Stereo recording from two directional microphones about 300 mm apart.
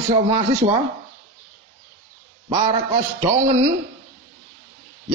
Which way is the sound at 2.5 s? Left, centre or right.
Centre.